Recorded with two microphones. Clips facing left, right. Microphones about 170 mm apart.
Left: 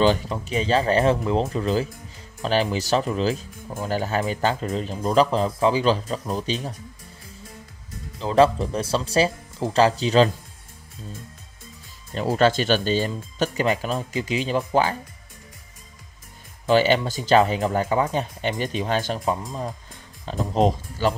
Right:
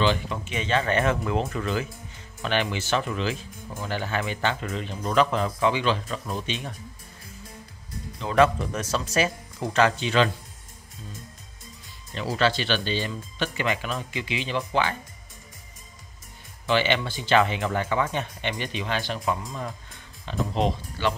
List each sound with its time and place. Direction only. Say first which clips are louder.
0.0 s speech: left 4 dB; 40° left (ahead or behind)
8.2 s speech: left 3 dB; 30° left (ahead or behind)
12.1 s speech: left 5 dB; 45° left (ahead or behind)
16.6 s speech: left 5 dB; 40° left (ahead or behind)
19.2 s speech: left 3 dB; 30° left (ahead or behind)
20.2 s speech: left 4 dB; 40° left (ahead or behind)